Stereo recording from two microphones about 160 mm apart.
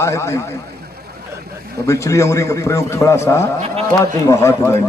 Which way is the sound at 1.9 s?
20° left (ahead or behind).